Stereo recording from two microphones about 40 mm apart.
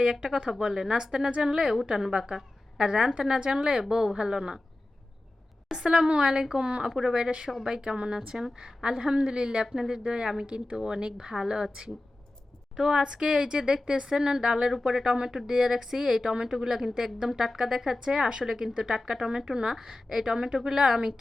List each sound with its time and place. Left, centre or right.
0.0 s a woman's voice: right
5.7 s a woman's voice: centre
13.0 s a woman's voice: right
19.7 s speech: centre